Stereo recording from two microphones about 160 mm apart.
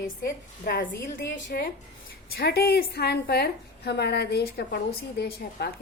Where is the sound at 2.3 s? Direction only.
85° left.